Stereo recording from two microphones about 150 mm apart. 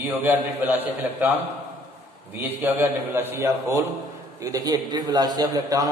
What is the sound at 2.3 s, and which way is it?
A man's voice, 15° right (ahead or behind).